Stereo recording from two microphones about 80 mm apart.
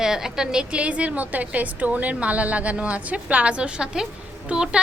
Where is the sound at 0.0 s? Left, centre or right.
Centre.